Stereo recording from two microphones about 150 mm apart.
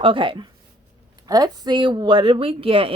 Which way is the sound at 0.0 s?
35° right (ahead or behind).